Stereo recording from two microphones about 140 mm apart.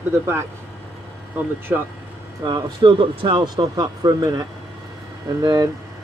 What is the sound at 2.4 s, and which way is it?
Speech, 35° right (ahead or behind).